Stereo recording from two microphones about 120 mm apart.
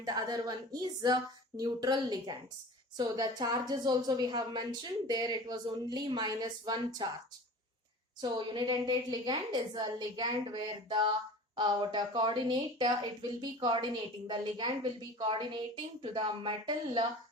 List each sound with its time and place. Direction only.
0.0 s a woman's voice: 30° right (ahead or behind)
8.2 s a woman's voice: 40° right (ahead or behind)